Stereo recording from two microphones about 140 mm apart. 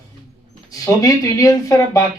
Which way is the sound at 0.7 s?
25° left (ahead or behind).